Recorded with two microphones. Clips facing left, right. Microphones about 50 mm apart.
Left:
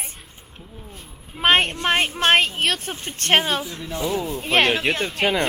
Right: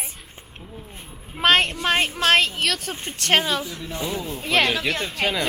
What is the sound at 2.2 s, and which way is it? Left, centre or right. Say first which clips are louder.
Speech: left 1 dB; left.